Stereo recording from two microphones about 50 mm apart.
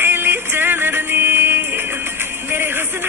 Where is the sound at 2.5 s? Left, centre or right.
Right.